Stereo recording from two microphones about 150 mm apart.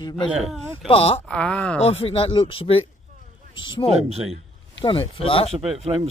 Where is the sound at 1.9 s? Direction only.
40° left (ahead or behind).